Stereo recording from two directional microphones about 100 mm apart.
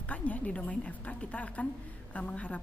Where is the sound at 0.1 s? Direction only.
15° left (ahead or behind).